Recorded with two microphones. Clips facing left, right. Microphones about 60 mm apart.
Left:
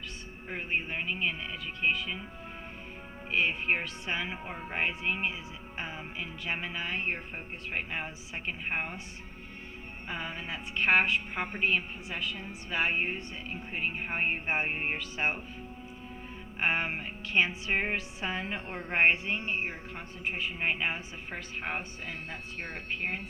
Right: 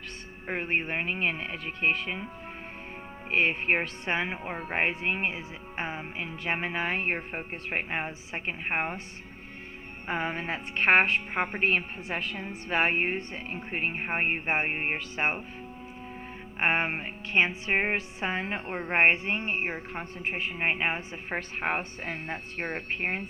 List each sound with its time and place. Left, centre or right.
0.4 s music: right
3.2 s music: right
10.1 s music: right
16.6 s music: right